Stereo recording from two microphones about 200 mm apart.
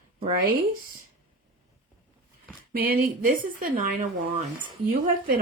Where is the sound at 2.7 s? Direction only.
50° right (ahead or behind).